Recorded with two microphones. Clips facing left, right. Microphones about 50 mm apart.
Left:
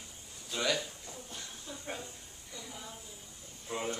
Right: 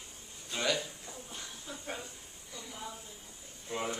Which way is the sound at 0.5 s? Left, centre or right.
Centre.